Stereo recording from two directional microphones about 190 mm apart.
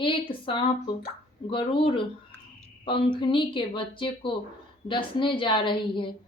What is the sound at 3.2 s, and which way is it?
A woman's voice, 25° left (ahead or behind).